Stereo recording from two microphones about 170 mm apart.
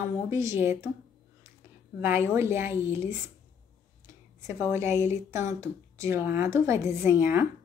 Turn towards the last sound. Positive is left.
turn(degrees=-10)  # may be behind; listen again after turning